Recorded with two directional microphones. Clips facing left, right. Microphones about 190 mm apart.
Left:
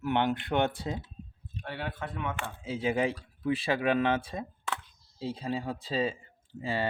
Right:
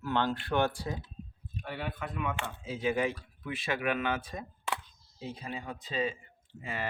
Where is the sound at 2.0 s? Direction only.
25° left (ahead or behind).